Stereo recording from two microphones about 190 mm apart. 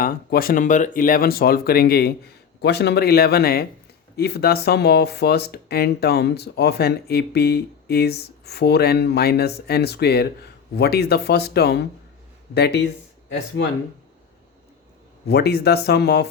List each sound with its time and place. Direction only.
0.0 s speech: 50° left (ahead or behind)
15.3 s speech: 60° left (ahead or behind)